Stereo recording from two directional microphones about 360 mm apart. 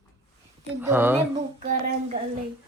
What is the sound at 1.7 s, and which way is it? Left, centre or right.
Speech, right.